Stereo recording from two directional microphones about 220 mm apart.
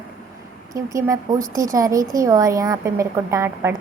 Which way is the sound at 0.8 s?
15° right (ahead or behind).